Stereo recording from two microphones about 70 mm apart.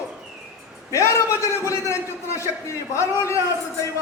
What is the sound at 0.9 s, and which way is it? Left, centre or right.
A man's voice, left.